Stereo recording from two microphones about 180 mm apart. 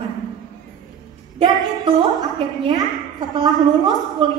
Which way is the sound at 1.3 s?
25° right (ahead or behind).